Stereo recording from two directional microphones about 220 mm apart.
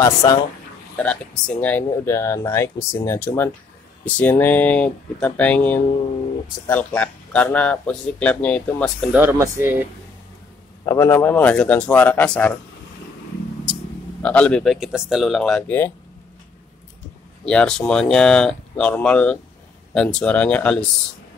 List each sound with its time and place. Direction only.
0.0 s speech: 15° left (ahead or behind)
0.9 s speech: 5° left (ahead or behind)
9.1 s speech: 10° right (ahead or behind)
10.9 s speech: 10° left (ahead or behind)
14.2 s speech: 5° left (ahead or behind)
17.5 s speech: 5° left (ahead or behind)